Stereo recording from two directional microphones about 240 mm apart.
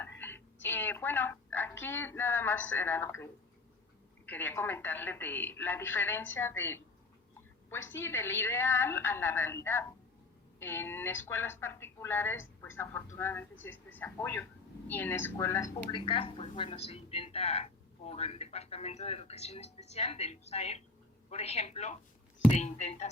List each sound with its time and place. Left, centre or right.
0.0 s a woman's voice: centre
4.3 s a woman's voice: centre; by 23.0 s left